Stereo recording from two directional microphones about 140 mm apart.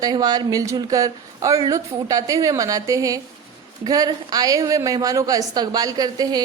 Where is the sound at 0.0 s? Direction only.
30° right (ahead or behind).